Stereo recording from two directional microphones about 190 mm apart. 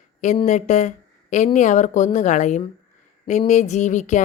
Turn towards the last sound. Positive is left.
turn(degrees=40)  # may be behind; listen again after turning